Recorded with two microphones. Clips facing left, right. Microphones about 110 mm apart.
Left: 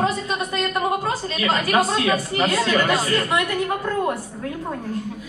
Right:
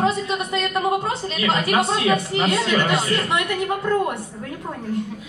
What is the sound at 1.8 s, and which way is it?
Speech, 25° right (ahead or behind).